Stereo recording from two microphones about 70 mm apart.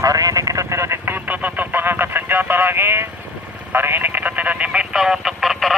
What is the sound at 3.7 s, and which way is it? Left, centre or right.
Speech, right.